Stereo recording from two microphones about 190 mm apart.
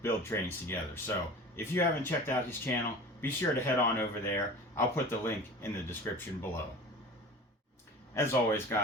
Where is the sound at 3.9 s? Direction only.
10° left (ahead or behind).